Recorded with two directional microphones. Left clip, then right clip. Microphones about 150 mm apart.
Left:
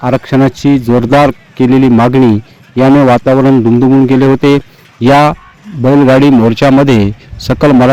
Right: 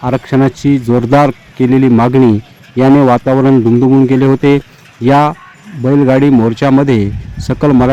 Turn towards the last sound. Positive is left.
turn(degrees=20)  # may be behind; listen again after turning